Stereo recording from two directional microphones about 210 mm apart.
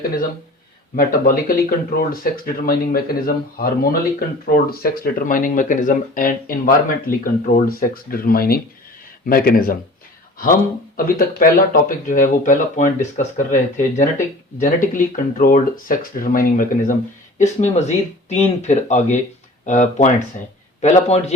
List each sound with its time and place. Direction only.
0.9 s speech: 45° left (ahead or behind)
10.9 s speech: 40° left (ahead or behind)